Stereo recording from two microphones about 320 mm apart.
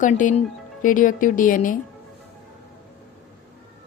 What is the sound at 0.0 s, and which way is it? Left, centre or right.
Speech, left.